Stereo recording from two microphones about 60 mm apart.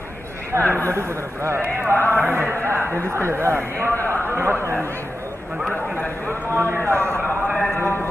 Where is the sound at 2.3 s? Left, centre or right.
Right.